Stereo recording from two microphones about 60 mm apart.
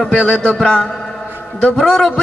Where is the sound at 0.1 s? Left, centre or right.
Centre.